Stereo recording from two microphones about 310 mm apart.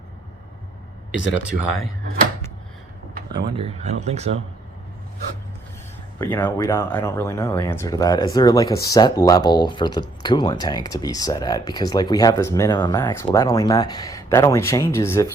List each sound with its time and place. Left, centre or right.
1.4 s speech: centre
3.3 s speech: centre
6.1 s speech: centre